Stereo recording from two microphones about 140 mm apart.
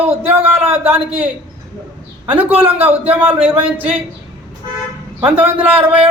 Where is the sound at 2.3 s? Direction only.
10° right (ahead or behind).